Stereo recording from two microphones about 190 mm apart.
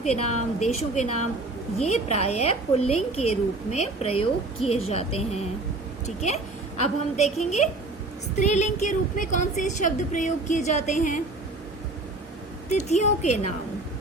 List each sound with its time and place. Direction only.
0.0 s a woman's voice: 35° left (ahead or behind)
12.6 s a woman's voice: 35° left (ahead or behind)